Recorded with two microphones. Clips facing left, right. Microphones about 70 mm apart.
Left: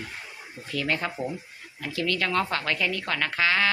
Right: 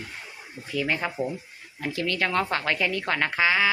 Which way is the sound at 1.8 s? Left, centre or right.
Right.